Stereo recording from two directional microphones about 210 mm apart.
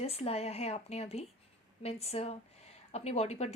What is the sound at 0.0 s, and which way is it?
Speech, 30° left (ahead or behind).